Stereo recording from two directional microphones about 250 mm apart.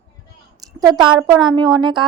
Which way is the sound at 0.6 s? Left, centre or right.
Centre.